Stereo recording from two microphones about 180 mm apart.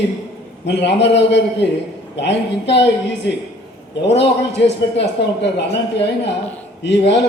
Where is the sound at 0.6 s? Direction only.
75° left (ahead or behind).